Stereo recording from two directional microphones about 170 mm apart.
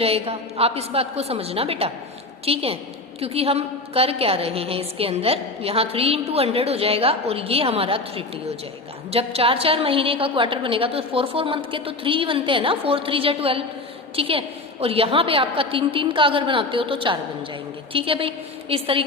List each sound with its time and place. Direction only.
0.0 s a woman's voice: 35° right (ahead or behind)